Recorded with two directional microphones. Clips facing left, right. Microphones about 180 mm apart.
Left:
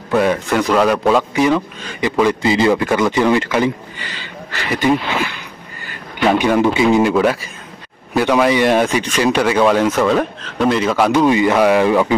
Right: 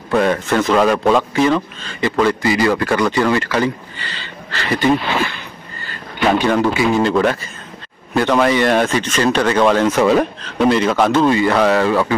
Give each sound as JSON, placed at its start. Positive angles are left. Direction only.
{"t": 0.1, "sound": "a man's voice", "side_deg": 5}
{"t": 1.3, "sound": "a man's voice", "side_deg": 15}
{"t": 5.8, "sound": "a sound", "side_deg": 15}
{"t": 6.7, "sound": "speech", "side_deg": 25}
{"t": 7.0, "sound": "a man's voice", "side_deg": 10}
{"t": 9.9, "sound": "a man's voice", "side_deg": -5}